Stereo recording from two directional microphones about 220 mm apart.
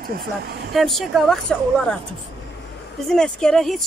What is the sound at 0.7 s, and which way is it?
Speech, centre (ahead or behind).